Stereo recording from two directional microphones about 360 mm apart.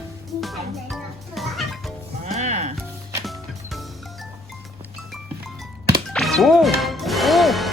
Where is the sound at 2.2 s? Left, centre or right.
Centre.